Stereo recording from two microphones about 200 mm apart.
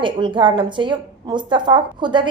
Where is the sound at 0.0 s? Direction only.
25° right (ahead or behind).